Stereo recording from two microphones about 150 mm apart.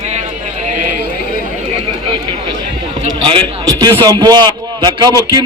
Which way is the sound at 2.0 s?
30° right (ahead or behind).